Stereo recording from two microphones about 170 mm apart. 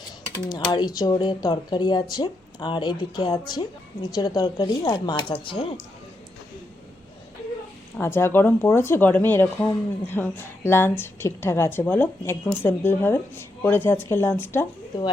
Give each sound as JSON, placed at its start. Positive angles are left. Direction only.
{"t": 0.4, "sound": "speech", "side_deg": 25}
{"t": 7.9, "sound": "a woman's voice", "side_deg": 15}